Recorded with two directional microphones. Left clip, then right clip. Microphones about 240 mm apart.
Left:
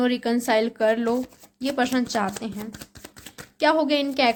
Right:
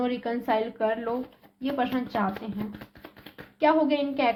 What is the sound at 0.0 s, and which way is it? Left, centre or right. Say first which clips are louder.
A woman's voice: left 5 dB; left.